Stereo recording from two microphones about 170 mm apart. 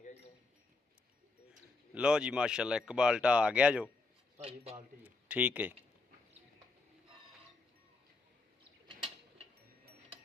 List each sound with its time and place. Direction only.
2.0 s speech: 5° right (ahead or behind)
4.4 s a man's voice: 35° right (ahead or behind)
5.0 s a man's voice: 10° right (ahead or behind)